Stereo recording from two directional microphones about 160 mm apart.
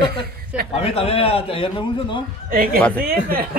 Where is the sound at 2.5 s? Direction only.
65° right (ahead or behind).